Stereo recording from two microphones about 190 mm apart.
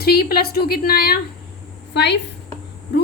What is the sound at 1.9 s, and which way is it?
Speech, 65° left (ahead or behind).